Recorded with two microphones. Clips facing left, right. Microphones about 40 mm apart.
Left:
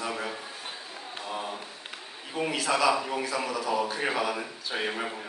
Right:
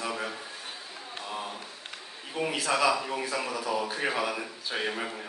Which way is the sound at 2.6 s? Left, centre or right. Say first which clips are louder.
Left 1 dB; centre.